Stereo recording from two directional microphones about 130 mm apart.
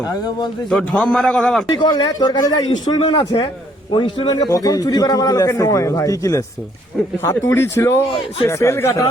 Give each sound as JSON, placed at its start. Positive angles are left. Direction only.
{"t": 0.1, "sound": "a man's voice", "side_deg": 30}
{"t": 0.7, "sound": "a man's voice", "side_deg": 5}
{"t": 1.8, "sound": "a man's voice", "side_deg": 30}
{"t": 4.4, "sound": "a man's voice", "side_deg": 25}